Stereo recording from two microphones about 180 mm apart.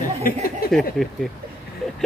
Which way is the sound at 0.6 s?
55° left (ahead or behind).